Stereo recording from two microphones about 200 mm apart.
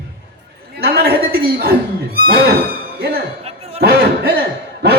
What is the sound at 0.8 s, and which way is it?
Speech, 50° right (ahead or behind).